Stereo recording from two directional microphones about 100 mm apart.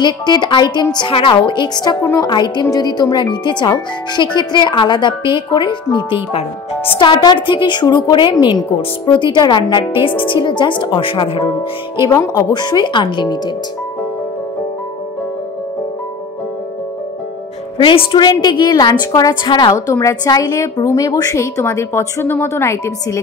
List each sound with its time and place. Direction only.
0.0 s speech: 50° left (ahead or behind)
0.9 s speech: 60° left (ahead or behind)
7.0 s speech: 50° left (ahead or behind)
12.1 s a woman's voice: 30° left (ahead or behind)
12.4 s speech: 45° left (ahead or behind)
17.7 s speech: 60° left (ahead or behind)
18.2 s speech: 45° left (ahead or behind)
19.7 s a woman's voice: 35° left (ahead or behind)